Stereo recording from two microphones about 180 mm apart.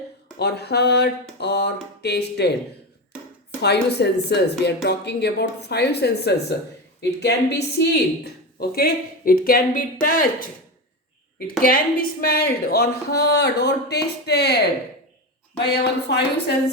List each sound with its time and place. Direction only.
0.3 s speech: 65° left (ahead or behind)
3.6 s speech: 65° left (ahead or behind); by 10.2 s 50° left (ahead or behind)
11.6 s speech: 55° left (ahead or behind)